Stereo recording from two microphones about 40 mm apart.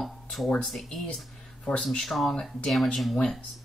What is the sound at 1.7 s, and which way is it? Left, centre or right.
Speech, centre.